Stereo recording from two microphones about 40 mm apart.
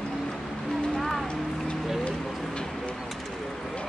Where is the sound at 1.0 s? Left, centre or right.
Centre.